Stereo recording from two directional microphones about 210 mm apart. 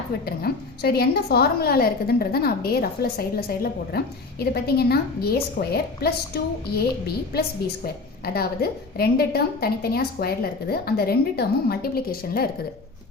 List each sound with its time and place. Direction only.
0.3 s a woman's voice: 50° left (ahead or behind)
8.2 s a woman's voice: 45° left (ahead or behind)